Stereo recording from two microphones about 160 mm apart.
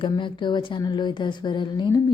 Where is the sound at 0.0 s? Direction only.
30° left (ahead or behind).